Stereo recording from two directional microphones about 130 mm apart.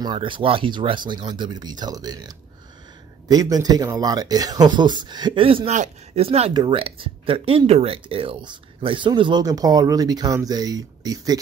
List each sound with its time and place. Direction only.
0.0 s speech: 35° right (ahead or behind)
5.7 s speech: 65° right (ahead or behind)
6.2 s speech: 50° right (ahead or behind)
6.5 s speech: 30° right (ahead or behind)
6.8 s speech: 45° right (ahead or behind); by 11.3 s 30° right (ahead or behind)